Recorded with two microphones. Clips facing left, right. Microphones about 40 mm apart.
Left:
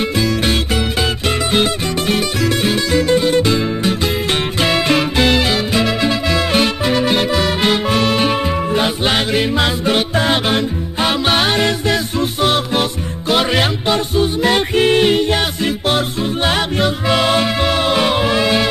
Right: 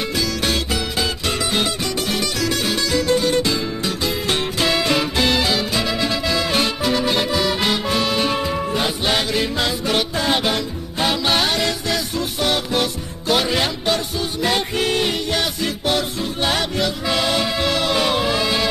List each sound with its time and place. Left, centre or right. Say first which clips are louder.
1.5 s music: left 5 dB; left
13.3 s music: left 4 dB; left